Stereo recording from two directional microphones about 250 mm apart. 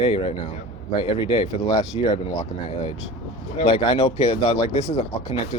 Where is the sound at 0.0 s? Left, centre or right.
Left.